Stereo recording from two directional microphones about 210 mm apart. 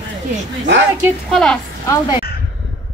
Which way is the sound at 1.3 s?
Centre (ahead or behind).